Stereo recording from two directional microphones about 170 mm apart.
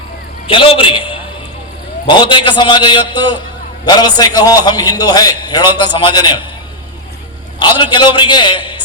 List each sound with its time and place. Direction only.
0.4 s a man's voice: 30° left (ahead or behind)
7.6 s a man's voice: 25° left (ahead or behind)